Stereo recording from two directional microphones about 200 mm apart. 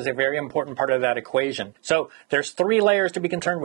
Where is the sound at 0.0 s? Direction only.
10° right (ahead or behind).